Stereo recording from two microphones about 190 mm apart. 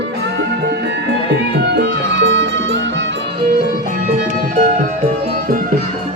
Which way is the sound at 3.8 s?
50° right (ahead or behind).